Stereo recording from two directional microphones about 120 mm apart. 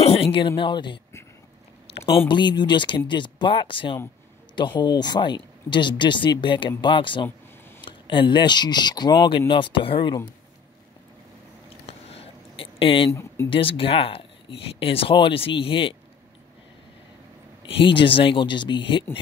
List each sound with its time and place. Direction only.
0.0 s speech: 55° left (ahead or behind)
2.1 s speech: 40° left (ahead or behind)
11.8 s a sound: 55° left (ahead or behind)
13.1 s speech: 25° left (ahead or behind)
13.5 s speech: 45° left (ahead or behind)
17.6 s speech: 45° left (ahead or behind)